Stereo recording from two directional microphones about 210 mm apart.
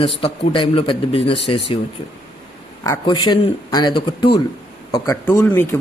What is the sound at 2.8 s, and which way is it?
A man's voice, 15° left (ahead or behind).